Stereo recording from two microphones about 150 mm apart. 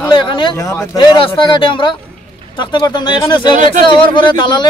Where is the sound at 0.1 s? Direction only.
35° left (ahead or behind).